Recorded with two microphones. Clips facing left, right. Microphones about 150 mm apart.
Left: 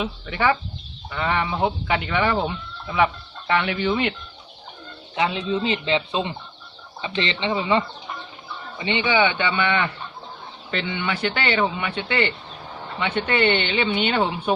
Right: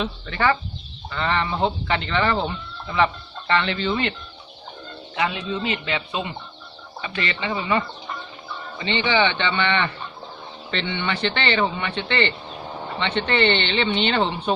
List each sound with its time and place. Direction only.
0.0 s speech: 10° left (ahead or behind)
5.1 s speech: 20° left (ahead or behind)